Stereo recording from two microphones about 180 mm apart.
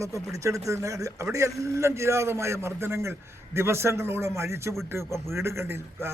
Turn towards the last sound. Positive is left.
turn(degrees=-15)  # may be behind; listen again after turning